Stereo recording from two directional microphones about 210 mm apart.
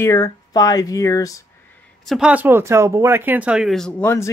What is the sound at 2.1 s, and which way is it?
Speech, 5° right (ahead or behind).